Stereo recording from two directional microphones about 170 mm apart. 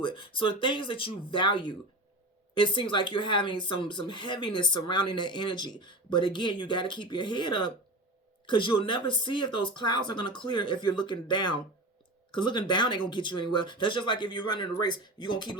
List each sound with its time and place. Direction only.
0.0 s speech: 30° left (ahead or behind)